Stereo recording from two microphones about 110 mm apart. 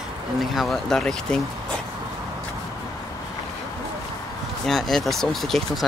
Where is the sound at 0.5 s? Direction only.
Centre (ahead or behind).